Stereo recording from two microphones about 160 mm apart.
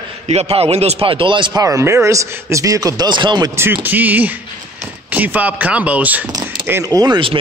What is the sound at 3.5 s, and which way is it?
Speech, 15° right (ahead or behind).